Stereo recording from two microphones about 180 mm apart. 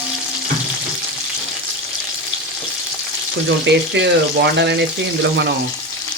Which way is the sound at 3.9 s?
70° right (ahead or behind).